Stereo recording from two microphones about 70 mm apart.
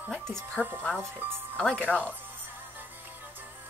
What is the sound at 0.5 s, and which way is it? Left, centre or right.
Speech, right.